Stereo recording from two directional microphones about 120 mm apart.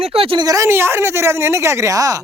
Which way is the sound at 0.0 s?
55° right (ahead or behind).